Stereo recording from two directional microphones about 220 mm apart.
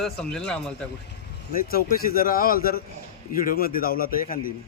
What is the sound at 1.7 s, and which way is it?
A man's voice, 40° left (ahead or behind).